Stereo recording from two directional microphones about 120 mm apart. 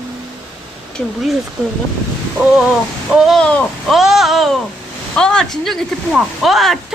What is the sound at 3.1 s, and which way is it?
Speech, centre (ahead or behind).